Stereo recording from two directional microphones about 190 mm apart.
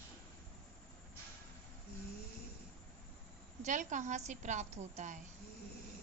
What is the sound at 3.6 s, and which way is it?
A woman's voice, 40° right (ahead or behind).